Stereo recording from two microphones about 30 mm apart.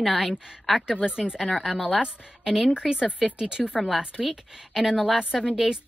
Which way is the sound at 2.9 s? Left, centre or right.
Right.